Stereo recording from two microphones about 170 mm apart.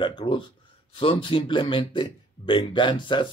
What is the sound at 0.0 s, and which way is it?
A man's voice, 30° left (ahead or behind).